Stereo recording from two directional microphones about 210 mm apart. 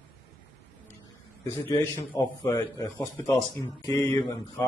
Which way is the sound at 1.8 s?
15° left (ahead or behind).